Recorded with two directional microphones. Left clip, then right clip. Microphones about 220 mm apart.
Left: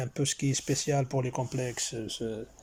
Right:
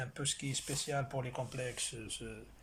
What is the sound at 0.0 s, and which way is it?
Speech, 30° left (ahead or behind).